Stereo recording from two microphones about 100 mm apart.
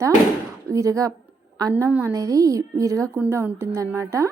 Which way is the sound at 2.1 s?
35° right (ahead or behind).